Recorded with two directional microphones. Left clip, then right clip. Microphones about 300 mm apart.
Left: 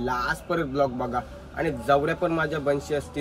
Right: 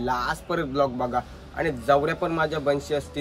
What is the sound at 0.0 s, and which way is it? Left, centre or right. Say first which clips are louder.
Speech: right 1 dB; centre.